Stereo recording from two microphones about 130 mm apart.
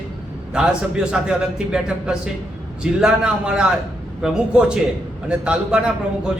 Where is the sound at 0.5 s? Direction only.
5° right (ahead or behind).